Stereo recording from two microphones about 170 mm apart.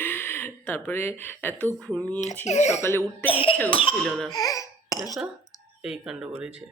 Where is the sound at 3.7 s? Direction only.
30° left (ahead or behind).